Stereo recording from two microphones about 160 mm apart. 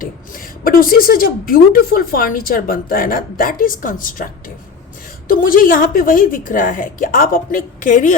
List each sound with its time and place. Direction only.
0.0 s a woman's voice: 60° left (ahead or behind)